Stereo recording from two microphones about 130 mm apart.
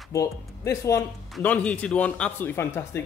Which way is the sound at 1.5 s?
10° left (ahead or behind).